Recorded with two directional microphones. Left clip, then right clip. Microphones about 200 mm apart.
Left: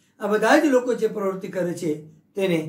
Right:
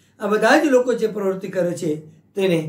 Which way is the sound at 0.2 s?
20° right (ahead or behind).